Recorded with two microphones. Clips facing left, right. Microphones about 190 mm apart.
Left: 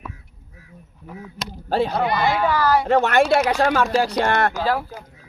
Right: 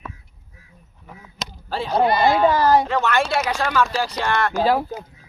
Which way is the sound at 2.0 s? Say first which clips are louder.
Right 4 dB; 25° right (ahead or behind).